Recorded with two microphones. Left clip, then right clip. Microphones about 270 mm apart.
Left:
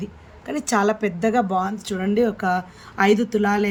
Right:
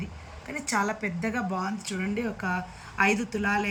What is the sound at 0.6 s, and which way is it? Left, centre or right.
Speech, left.